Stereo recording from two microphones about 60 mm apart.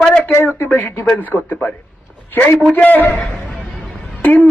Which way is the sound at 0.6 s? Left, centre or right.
Left.